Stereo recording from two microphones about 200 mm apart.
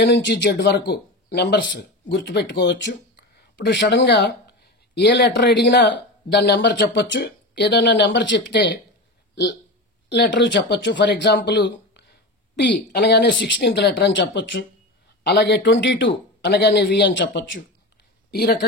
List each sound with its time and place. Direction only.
0.0 s speech: 55° left (ahead or behind)
18.3 s speech: 50° left (ahead or behind)